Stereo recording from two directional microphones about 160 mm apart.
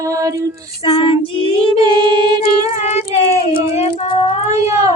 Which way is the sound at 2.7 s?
40° left (ahead or behind).